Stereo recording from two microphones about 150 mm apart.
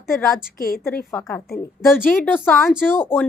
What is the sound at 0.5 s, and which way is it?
Speech, 75° left (ahead or behind).